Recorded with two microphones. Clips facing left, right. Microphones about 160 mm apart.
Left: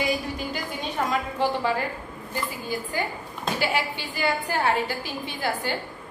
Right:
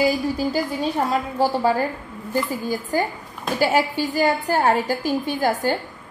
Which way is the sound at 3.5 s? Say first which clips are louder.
Right 8 dB; 40° right (ahead or behind).